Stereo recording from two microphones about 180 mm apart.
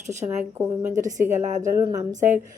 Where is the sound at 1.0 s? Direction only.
45° right (ahead or behind).